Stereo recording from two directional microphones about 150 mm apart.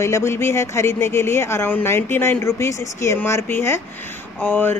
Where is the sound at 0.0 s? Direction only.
20° left (ahead or behind).